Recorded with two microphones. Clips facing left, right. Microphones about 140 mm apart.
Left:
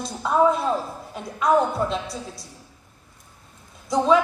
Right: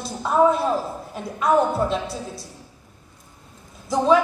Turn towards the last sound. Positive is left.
turn(degrees=0)  # may be behind; listen again after turning